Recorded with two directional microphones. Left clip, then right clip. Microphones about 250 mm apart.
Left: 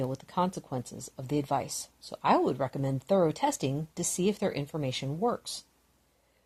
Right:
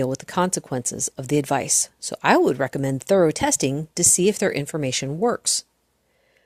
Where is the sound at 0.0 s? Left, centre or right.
Right.